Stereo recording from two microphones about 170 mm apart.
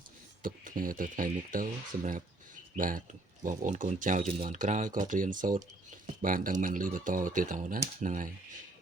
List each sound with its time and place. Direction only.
0.4 s speech: 55° right (ahead or behind)